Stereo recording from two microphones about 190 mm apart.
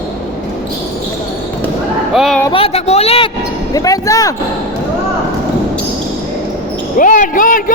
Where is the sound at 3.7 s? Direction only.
20° left (ahead or behind).